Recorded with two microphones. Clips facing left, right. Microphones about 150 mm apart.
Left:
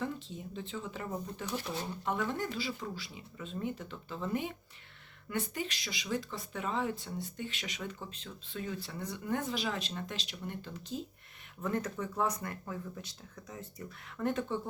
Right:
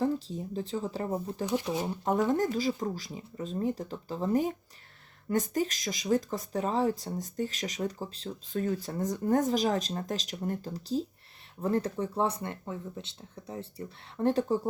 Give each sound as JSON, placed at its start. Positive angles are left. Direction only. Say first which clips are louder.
{"t": 0.0, "sound": "speech", "louder": "right 9 dB", "side_deg": -35}
{"t": 1.5, "sound": "speech", "louder": "right 8 dB", "side_deg": -15}
{"t": 2.0, "sound": "speech", "louder": "right 8 dB", "side_deg": -40}